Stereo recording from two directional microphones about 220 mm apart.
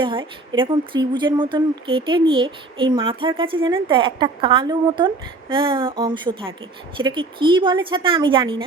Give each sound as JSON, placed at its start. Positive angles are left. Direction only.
{"t": 0.0, "sound": "speech", "side_deg": -20}